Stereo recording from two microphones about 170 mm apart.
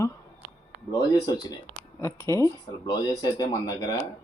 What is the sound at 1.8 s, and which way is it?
Speech, 15° left (ahead or behind).